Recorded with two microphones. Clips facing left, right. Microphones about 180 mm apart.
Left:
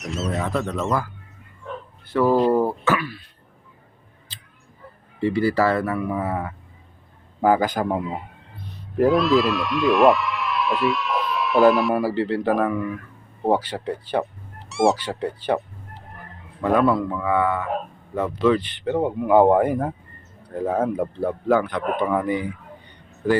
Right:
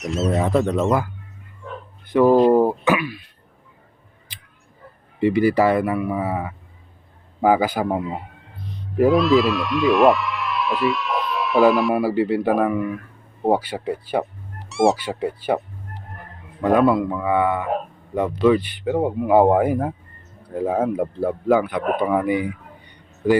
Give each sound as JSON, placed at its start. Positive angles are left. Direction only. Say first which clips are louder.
{"t": 0.0, "sound": "speech", "louder": "right 5 dB", "side_deg": 0}
{"t": 2.0, "sound": "speech", "louder": "right 4 dB", "side_deg": -15}
{"t": 4.3, "sound": "a sound", "louder": "even", "side_deg": -15}
{"t": 5.2, "sound": "speech", "louder": "right 3 dB", "side_deg": -15}
{"t": 12.0, "sound": "speech", "louder": "right 2 dB", "side_deg": -10}
{"t": 14.7, "sound": "music", "louder": "right 1 dB", "side_deg": 0}
{"t": 14.9, "sound": "speech", "louder": "right 2 dB", "side_deg": -10}